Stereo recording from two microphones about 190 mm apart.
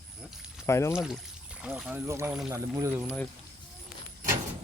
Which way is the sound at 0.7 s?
15° left (ahead or behind).